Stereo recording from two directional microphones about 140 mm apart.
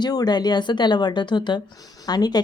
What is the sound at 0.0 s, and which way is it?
A woman's voice, 30° left (ahead or behind).